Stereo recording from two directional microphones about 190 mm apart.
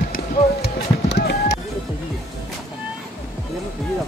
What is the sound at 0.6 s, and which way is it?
Music, 60° left (ahead or behind).